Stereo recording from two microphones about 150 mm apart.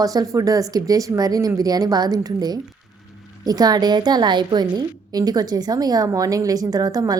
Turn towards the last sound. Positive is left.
turn(degrees=-25)  # may be behind; listen again after turning